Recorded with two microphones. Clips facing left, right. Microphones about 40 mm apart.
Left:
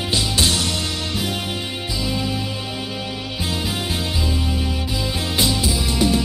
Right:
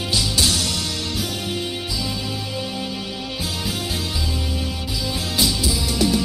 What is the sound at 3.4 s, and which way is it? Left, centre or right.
Music, left.